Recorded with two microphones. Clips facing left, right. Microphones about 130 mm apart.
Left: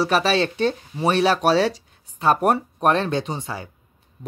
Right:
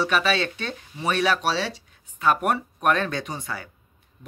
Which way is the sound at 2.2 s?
35° left (ahead or behind).